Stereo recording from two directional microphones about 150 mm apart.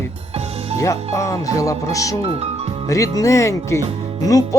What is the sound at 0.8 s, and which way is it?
Music, 20° left (ahead or behind).